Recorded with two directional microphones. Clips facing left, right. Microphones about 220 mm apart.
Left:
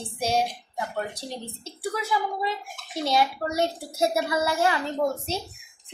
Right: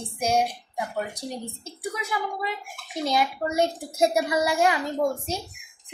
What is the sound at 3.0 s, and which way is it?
A child's voice, 15° right (ahead or behind).